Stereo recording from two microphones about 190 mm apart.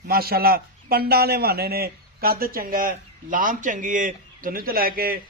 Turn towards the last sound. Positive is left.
turn(degrees=-50)  # may be behind; listen again after turning